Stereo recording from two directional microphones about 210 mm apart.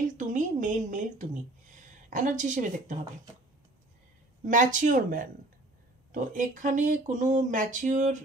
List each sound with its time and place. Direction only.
0.0 s a woman's voice: 35° right (ahead or behind)
4.5 s speech: 40° right (ahead or behind)